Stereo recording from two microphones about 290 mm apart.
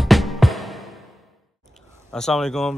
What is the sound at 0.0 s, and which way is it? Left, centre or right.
Music, centre.